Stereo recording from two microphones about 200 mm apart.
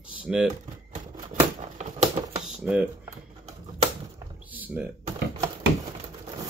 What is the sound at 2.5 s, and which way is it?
Speech, 5° right (ahead or behind).